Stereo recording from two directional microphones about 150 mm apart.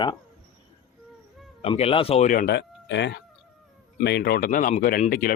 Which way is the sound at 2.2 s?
60° left (ahead or behind).